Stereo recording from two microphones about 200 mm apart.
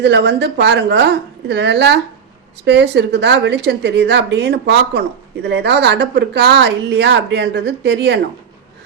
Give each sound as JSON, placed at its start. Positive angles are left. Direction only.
{"t": 0.0, "sound": "a woman's voice", "side_deg": -60}